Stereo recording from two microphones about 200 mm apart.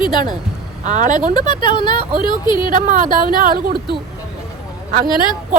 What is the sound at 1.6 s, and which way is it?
Speech, 25° left (ahead or behind).